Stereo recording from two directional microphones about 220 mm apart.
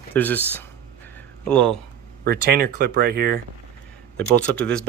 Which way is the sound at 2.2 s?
45° right (ahead or behind).